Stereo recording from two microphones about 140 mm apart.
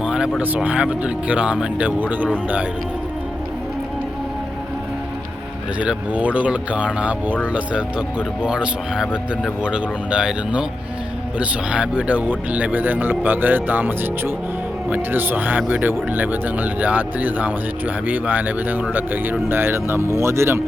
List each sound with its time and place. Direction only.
0.0 s speech: 5° right (ahead or behind)
5.8 s speech: 10° right (ahead or behind)